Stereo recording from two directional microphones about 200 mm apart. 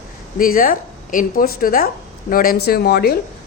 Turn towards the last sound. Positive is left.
turn(degrees=50)  # may be behind; listen again after turning